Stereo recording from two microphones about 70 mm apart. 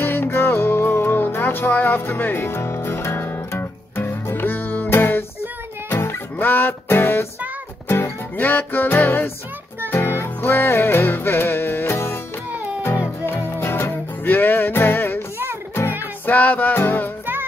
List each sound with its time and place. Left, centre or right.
0.0 s music: left
8.4 s music: left